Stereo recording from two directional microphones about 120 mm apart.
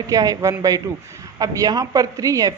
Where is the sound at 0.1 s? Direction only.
30° right (ahead or behind).